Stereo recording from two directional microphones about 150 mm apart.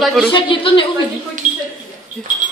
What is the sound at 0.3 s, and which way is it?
Speech, 35° left (ahead or behind).